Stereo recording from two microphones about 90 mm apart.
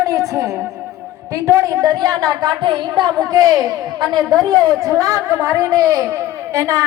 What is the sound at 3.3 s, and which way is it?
Speech, 40° right (ahead or behind).